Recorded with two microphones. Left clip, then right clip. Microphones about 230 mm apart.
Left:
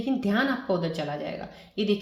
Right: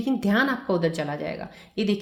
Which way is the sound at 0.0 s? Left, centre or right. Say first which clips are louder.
Right 3 dB; right.